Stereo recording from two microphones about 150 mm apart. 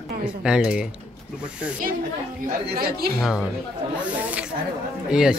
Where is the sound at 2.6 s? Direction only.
90° right.